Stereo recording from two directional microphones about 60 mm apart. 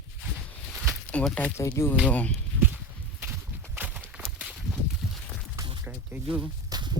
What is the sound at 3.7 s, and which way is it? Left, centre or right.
Clip-clop, right.